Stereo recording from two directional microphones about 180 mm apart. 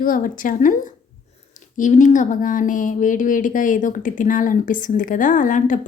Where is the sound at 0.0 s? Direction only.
50° left (ahead or behind).